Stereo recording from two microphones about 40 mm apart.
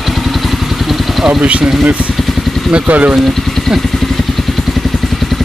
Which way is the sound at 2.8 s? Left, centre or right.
Right.